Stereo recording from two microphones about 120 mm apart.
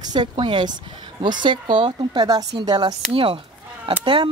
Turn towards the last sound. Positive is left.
turn(degrees=-45)  # may be behind; listen again after turning